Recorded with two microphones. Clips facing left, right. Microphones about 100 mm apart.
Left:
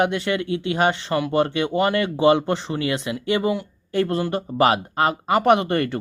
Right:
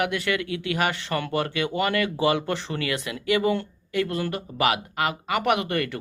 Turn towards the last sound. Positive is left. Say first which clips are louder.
# left 6 dB
turn(degrees=30)  # may be behind; listen again after turning